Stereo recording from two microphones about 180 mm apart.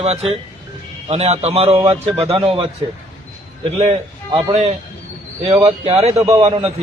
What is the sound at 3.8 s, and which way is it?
A man's voice, 35° right (ahead or behind).